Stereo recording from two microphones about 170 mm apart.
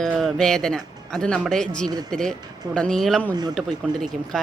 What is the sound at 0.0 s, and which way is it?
A woman's voice, centre (ahead or behind).